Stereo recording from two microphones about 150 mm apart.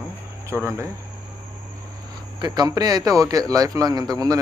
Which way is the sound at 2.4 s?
30° right (ahead or behind).